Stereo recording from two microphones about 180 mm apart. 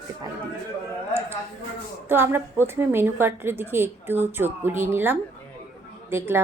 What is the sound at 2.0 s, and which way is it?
Speech, 10° right (ahead or behind).